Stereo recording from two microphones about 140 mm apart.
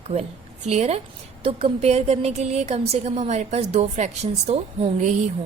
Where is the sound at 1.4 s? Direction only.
40° right (ahead or behind).